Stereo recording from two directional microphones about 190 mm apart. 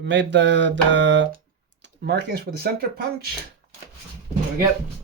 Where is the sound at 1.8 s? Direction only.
60° right (ahead or behind).